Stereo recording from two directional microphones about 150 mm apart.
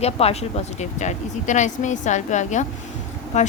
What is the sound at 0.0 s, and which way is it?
A woman's voice, 45° left (ahead or behind).